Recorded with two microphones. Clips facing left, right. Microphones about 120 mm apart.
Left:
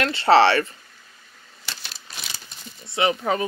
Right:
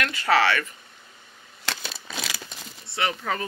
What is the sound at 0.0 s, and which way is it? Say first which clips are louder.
Speech: left 6 dB; 30° left (ahead or behind).